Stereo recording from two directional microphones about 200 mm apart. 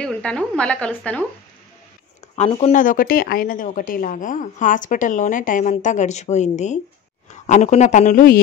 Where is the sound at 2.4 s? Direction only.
30° left (ahead or behind).